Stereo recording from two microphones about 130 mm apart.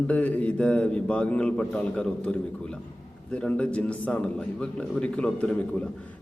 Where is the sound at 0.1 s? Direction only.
10° left (ahead or behind).